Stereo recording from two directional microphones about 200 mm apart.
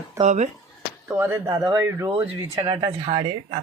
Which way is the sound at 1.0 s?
10° right (ahead or behind).